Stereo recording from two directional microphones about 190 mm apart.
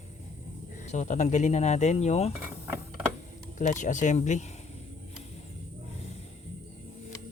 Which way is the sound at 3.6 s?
40° left (ahead or behind).